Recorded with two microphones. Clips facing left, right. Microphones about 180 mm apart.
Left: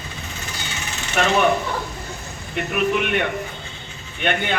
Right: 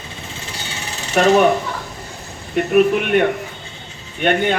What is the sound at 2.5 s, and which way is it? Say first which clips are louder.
A man's voice: right 7 dB; 45° right (ahead or behind).